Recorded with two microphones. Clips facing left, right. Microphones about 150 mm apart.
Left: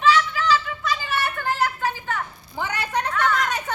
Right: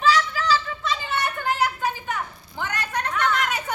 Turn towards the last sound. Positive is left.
turn(degrees=-5)  # may be behind; listen again after turning